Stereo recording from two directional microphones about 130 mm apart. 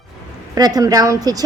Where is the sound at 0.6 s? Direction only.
30° right (ahead or behind).